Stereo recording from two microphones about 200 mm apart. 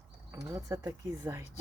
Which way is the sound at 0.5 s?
15° right (ahead or behind).